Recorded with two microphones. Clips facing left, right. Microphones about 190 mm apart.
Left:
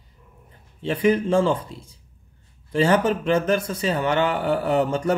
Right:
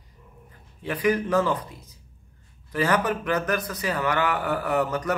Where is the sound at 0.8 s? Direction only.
25° left (ahead or behind).